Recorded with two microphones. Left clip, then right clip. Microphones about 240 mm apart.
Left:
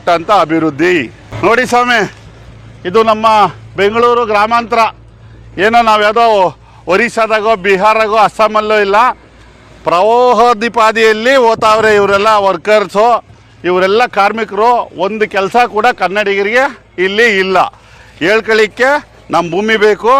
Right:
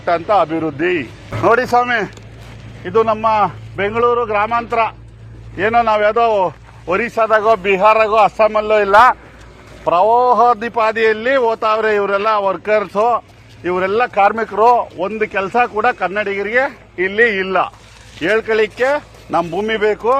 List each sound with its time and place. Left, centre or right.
0.0 s a man's voice: left